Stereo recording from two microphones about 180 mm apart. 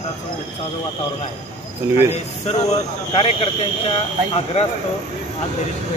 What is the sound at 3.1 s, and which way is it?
Speech, 30° left (ahead or behind).